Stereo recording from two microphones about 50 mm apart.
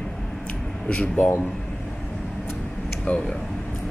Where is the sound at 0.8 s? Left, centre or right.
Left.